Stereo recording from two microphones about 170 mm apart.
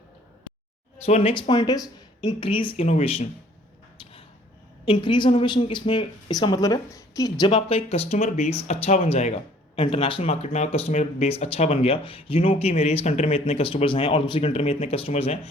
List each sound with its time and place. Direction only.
1.0 s speech: 35° left (ahead or behind)
4.9 s speech: 30° left (ahead or behind)